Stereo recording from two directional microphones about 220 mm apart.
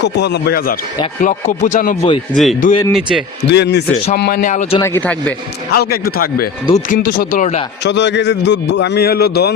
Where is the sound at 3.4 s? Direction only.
50° left (ahead or behind); by 4.8 s 35° left (ahead or behind).